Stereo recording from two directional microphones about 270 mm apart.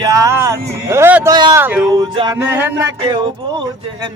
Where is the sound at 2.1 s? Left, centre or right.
Centre.